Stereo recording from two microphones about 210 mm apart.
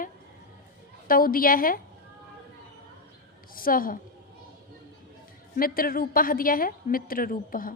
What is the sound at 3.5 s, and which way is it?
Speech, 45° left (ahead or behind).